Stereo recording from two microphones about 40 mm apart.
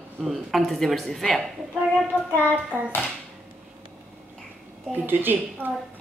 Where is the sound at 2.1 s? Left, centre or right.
Left.